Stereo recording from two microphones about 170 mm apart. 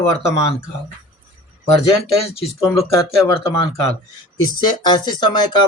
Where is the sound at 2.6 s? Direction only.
15° left (ahead or behind).